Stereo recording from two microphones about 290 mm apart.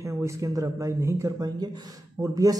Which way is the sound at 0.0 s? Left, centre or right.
Centre.